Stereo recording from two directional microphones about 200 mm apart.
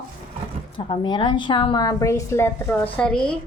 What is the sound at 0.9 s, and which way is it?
A woman's voice, 25° left (ahead or behind).